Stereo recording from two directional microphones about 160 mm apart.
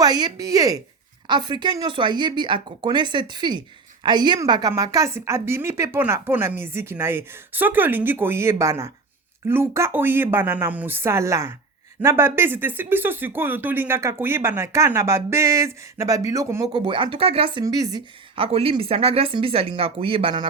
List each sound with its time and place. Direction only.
0.0 s speech: 25° right (ahead or behind)
18.3 s speech: 35° right (ahead or behind)